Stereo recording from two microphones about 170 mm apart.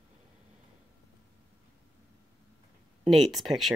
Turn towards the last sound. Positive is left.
turn(degrees=0)  # may be behind; listen again after turning